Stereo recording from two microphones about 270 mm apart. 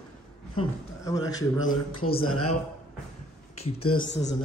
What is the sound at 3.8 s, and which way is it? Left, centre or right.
Speech, left.